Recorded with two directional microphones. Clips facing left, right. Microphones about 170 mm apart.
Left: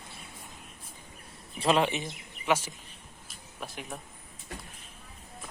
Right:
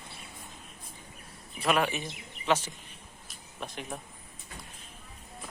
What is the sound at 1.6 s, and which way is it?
Speech, 25° left (ahead or behind).